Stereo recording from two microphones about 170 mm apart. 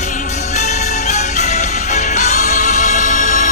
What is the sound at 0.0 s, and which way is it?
Music, 45° left (ahead or behind).